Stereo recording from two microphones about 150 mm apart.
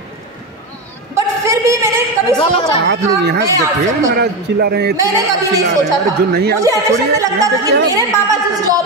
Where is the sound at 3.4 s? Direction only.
20° right (ahead or behind).